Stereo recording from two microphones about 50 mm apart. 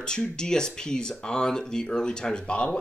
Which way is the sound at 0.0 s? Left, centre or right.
Centre.